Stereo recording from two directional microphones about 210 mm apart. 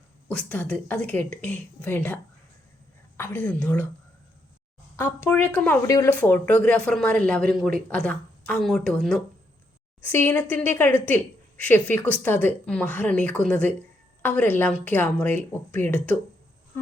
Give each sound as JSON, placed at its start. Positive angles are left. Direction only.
{"t": 0.3, "sound": "a woman's voice", "side_deg": 5}
{"t": 3.2, "sound": "a woman's voice", "side_deg": 10}
{"t": 4.9, "sound": "a woman's voice", "side_deg": 10}